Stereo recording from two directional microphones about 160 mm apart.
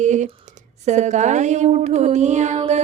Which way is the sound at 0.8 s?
45° right (ahead or behind).